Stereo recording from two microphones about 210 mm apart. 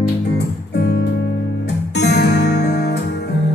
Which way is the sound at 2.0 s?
50° left (ahead or behind).